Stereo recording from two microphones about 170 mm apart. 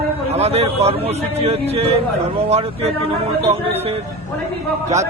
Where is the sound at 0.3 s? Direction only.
35° right (ahead or behind).